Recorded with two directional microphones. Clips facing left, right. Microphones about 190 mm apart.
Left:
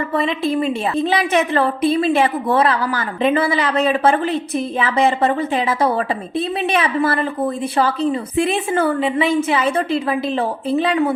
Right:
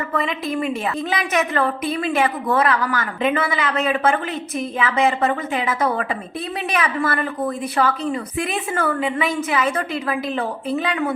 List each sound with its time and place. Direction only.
0.1 s a woman's voice: 30° left (ahead or behind)